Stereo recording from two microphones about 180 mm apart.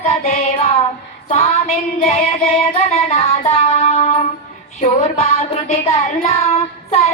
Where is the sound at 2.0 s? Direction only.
40° left (ahead or behind).